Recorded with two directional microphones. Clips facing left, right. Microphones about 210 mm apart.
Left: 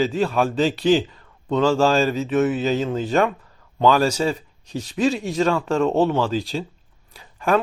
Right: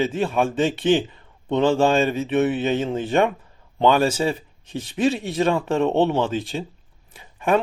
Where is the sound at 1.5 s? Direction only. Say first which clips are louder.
Even; 20° right (ahead or behind).